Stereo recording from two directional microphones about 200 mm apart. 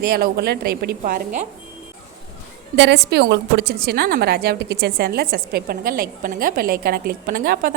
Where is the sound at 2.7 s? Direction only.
55° right (ahead or behind).